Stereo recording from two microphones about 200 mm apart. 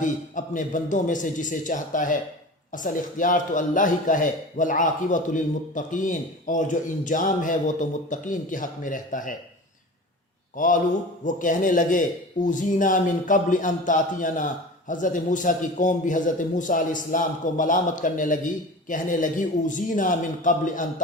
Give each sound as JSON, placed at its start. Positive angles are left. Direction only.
{"t": 0.0, "sound": "a man's voice", "side_deg": 40}
{"t": 10.5, "sound": "a man's voice", "side_deg": 40}